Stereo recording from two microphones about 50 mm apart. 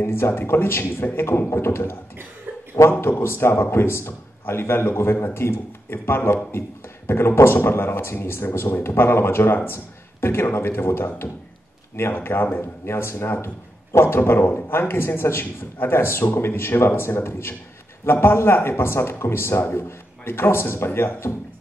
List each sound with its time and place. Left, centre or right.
0.0 s speech: left
12.8 s speech: left